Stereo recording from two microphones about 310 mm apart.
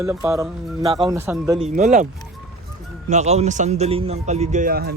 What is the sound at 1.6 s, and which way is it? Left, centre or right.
Speech, right.